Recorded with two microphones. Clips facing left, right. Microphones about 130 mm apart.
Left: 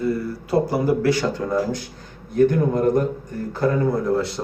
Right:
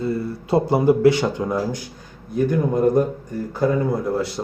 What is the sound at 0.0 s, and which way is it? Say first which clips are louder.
Speech: left 1 dB; 25° right (ahead or behind).